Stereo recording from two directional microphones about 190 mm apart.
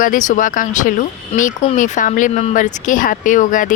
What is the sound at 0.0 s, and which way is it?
Speech, 40° left (ahead or behind).